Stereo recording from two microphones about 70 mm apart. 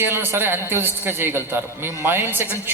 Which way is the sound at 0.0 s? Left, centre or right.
Right.